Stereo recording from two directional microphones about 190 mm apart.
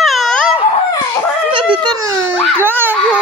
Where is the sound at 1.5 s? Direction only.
25° right (ahead or behind).